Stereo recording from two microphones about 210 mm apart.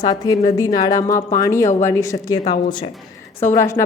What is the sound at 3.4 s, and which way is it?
Speech, 15° left (ahead or behind).